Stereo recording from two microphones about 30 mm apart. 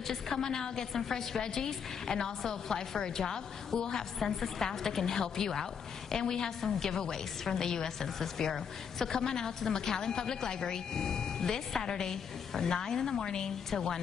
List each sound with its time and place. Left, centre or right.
0.1 s a woman's voice: centre